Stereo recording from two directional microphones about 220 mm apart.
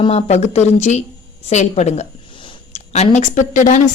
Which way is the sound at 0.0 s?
25° left (ahead or behind).